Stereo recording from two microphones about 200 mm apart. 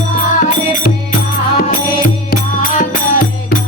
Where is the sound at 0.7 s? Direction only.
40° left (ahead or behind).